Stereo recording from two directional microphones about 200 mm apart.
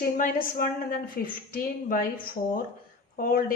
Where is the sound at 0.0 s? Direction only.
45° left (ahead or behind).